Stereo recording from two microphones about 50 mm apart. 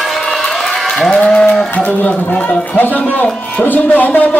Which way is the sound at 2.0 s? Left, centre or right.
Left.